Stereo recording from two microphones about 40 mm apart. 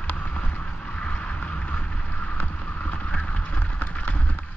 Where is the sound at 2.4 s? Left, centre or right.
Left.